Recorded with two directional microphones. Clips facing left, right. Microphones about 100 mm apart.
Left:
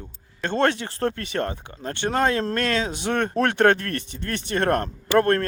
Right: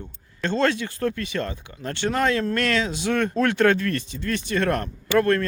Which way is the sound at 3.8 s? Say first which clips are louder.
Right 4 dB; 60° left (ahead or behind).